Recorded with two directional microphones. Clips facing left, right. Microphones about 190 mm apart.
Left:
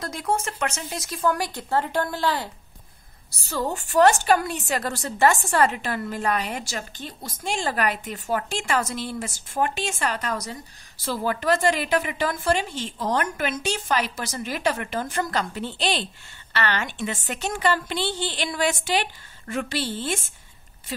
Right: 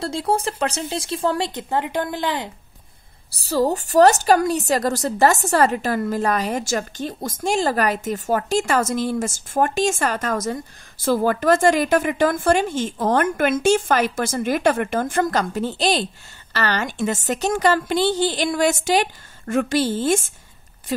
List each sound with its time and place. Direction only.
0.0 s speech: 30° right (ahead or behind)
3.3 s a woman's voice: 35° right (ahead or behind)